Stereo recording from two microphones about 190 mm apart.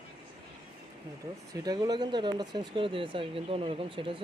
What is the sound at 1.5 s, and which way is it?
Speech, 20° right (ahead or behind).